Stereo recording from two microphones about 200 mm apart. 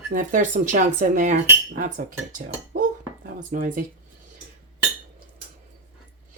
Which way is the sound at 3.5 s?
40° right (ahead or behind).